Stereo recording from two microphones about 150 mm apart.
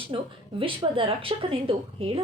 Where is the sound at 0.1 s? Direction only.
35° right (ahead or behind).